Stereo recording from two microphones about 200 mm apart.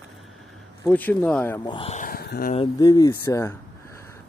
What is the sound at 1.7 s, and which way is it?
Speech, 30° left (ahead or behind).